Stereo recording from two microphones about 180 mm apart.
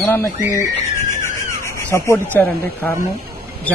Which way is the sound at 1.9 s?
10° left (ahead or behind).